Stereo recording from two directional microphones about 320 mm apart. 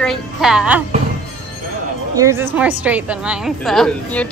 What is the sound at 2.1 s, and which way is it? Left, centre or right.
A woman's voice, centre.